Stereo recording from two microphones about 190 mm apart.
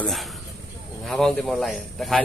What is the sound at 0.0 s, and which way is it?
Speech, centre (ahead or behind).